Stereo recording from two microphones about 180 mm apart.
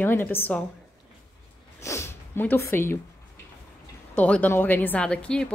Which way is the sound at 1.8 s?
15° left (ahead or behind).